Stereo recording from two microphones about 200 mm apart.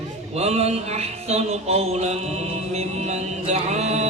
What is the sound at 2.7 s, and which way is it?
Mantra, 35° right (ahead or behind).